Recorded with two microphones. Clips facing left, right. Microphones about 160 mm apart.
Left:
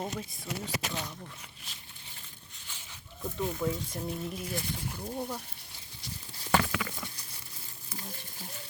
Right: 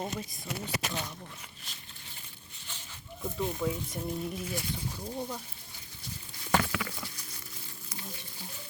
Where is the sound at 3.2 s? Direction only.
20° right (ahead or behind).